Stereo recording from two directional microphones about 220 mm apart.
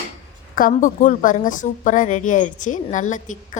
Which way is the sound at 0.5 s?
40° left (ahead or behind).